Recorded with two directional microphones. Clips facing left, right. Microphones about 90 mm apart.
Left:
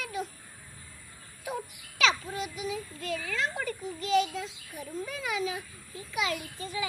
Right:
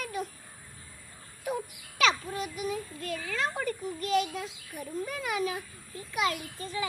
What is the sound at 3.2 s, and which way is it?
A child's voice, 40° right (ahead or behind).